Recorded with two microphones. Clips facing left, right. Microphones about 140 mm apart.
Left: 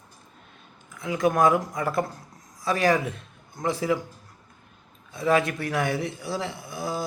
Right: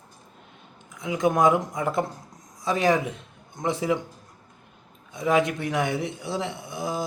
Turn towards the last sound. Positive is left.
turn(degrees=-20)  # may be behind; listen again after turning